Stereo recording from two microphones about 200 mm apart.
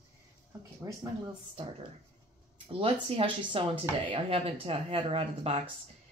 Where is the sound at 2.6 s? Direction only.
30° right (ahead or behind).